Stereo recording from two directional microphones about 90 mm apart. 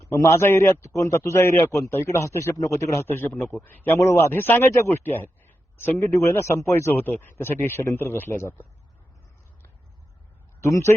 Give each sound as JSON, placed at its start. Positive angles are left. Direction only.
{"t": 0.3, "sound": "a man's voice", "side_deg": 30}
{"t": 10.6, "sound": "a man's voice", "side_deg": 30}